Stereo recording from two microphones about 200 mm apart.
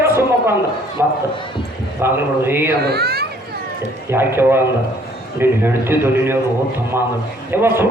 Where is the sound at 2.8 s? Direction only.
50° right (ahead or behind).